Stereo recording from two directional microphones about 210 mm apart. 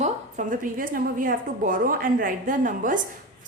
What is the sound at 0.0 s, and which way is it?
A woman's voice, 35° right (ahead or behind).